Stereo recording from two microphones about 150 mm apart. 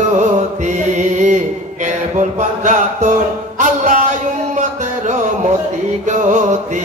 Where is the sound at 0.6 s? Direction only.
55° right (ahead or behind).